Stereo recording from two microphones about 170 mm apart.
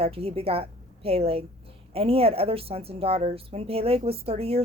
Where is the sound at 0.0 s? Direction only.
35° right (ahead or behind).